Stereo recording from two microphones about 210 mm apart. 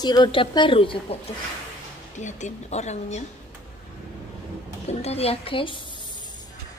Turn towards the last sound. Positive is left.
turn(degrees=25)  # may be behind; listen again after turning